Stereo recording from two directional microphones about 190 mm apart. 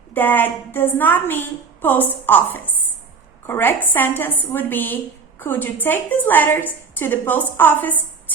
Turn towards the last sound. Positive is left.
turn(degrees=10)  # may be behind; listen again after turning